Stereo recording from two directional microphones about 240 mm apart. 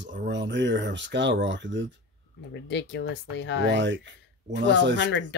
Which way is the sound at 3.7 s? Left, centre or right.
Right.